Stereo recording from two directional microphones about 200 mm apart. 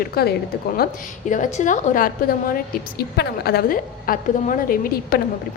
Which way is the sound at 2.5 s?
50° left (ahead or behind).